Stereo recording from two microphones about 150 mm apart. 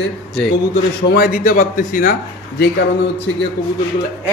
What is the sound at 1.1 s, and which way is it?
A man's voice, 80° left.